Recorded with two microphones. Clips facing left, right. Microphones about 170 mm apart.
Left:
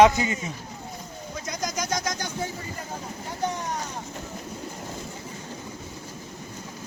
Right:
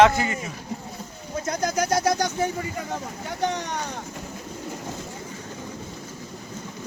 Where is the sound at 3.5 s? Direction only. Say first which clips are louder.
Right 2 dB; 75° right (ahead or behind).